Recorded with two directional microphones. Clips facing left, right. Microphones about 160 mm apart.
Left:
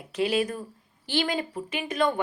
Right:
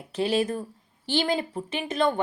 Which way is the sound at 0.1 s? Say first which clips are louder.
Right 1 dB; 30° right (ahead or behind).